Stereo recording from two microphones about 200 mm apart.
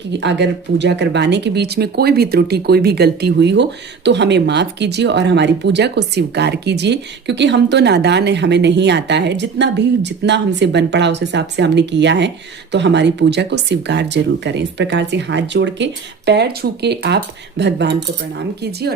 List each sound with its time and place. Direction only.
0.2 s speech: 60° right (ahead or behind)